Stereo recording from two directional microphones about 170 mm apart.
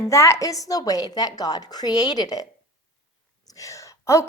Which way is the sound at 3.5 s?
20° left (ahead or behind).